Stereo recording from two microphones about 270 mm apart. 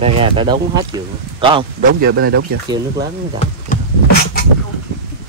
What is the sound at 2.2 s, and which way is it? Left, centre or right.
Speech, right.